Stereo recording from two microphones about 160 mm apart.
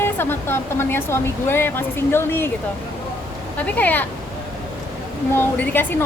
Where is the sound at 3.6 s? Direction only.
10° left (ahead or behind).